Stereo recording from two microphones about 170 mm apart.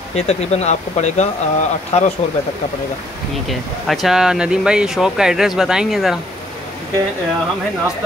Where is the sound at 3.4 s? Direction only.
Centre (ahead or behind).